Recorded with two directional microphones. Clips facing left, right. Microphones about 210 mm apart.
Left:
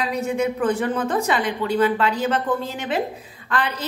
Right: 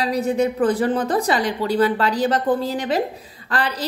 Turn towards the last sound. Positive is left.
turn(degrees=-35)  # may be behind; listen again after turning